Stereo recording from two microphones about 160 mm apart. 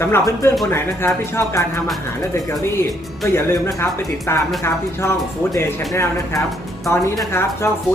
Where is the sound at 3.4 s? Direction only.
15° left (ahead or behind).